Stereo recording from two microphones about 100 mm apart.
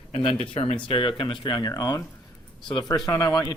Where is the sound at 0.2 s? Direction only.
70° left (ahead or behind).